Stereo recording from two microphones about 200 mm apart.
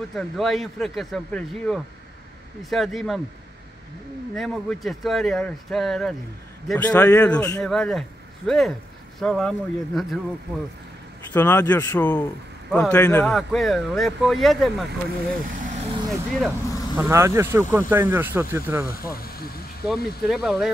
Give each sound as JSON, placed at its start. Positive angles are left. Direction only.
{"t": 0.1, "sound": "speech", "side_deg": 0}
{"t": 4.4, "sound": "speech", "side_deg": 0}
{"t": 6.9, "sound": "a man's voice", "side_deg": 10}
{"t": 11.3, "sound": "a man's voice", "side_deg": 10}
{"t": 13.2, "sound": "speech", "side_deg": 0}
{"t": 15.4, "sound": "vehicle", "side_deg": -40}
{"t": 16.3, "sound": "speech", "side_deg": 0}
{"t": 18.9, "sound": "speech", "side_deg": 45}
{"t": 19.9, "sound": "speech", "side_deg": 0}